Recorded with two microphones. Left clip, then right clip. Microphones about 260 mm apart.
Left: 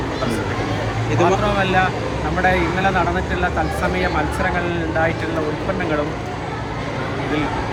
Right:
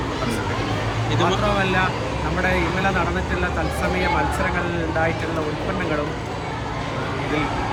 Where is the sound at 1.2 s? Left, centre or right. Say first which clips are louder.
Left 3 dB; centre.